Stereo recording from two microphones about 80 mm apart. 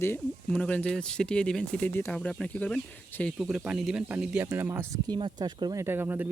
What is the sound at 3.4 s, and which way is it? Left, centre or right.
Speech, centre.